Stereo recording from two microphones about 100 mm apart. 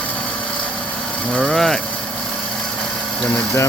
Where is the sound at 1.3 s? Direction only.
5° left (ahead or behind).